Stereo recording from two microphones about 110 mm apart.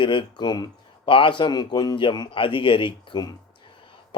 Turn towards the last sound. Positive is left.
turn(degrees=45)  # may be behind; listen again after turning